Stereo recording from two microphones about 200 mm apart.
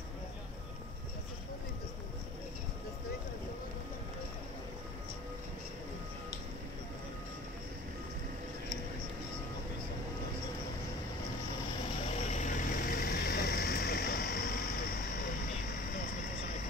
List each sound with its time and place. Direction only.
12.1 s vehicle: 35° left (ahead or behind)